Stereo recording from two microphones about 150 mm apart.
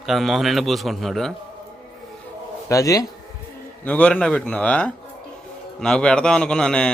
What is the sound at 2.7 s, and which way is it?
Speech, 20° left (ahead or behind).